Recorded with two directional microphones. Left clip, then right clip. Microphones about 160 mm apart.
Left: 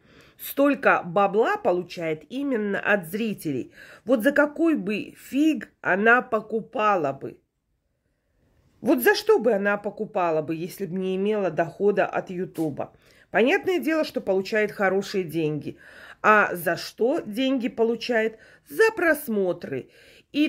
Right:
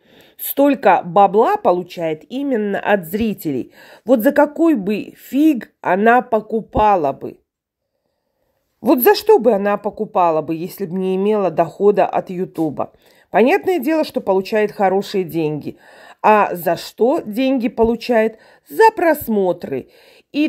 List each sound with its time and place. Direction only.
0.4 s speech: 30° right (ahead or behind)
8.8 s speech: 35° right (ahead or behind)